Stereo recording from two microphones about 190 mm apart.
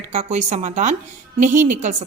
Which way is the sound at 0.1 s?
35° right (ahead or behind).